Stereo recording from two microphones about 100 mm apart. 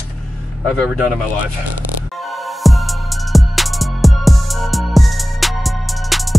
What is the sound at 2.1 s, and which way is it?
Music, centre (ahead or behind).